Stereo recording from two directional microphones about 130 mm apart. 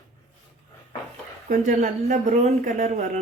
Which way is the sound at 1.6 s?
65° right (ahead or behind).